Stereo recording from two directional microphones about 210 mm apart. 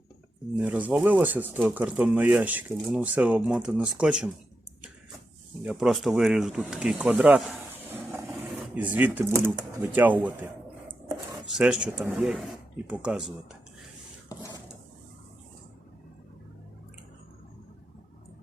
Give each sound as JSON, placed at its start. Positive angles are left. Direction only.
{"t": 0.5, "sound": "speech", "side_deg": -5}
{"t": 5.6, "sound": "speech", "side_deg": 0}
{"t": 11.5, "sound": "speech", "side_deg": -5}
{"t": 14.3, "sound": "drawer open or close", "side_deg": 15}